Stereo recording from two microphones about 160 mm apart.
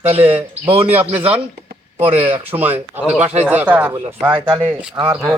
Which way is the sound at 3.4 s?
10° right (ahead or behind).